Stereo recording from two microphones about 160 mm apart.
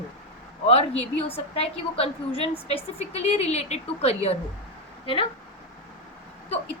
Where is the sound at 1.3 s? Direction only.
40° left (ahead or behind).